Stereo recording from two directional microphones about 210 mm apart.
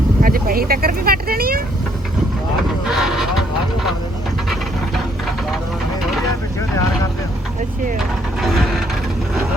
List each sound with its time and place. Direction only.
0.2 s speech: 45° right (ahead or behind)
2.9 s speech: centre (ahead or behind)
7.9 s vehicle: centre (ahead or behind)